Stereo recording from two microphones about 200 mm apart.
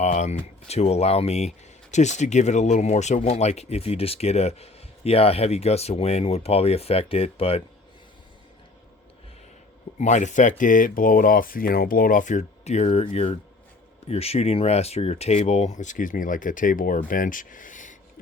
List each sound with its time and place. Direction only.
0.0 s speech: 35° left (ahead or behind)
10.0 s speech: 35° left (ahead or behind)